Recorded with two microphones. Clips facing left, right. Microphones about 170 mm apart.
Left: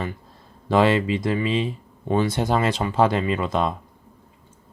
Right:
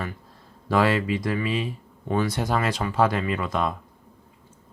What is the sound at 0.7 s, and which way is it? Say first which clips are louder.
Speech: left 3 dB; 25° left (ahead or behind).